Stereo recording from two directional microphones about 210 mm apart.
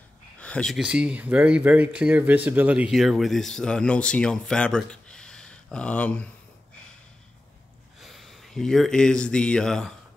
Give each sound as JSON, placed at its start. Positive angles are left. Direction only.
{"t": 0.4, "sound": "speech", "side_deg": 5}
{"t": 8.0, "sound": "speech", "side_deg": 0}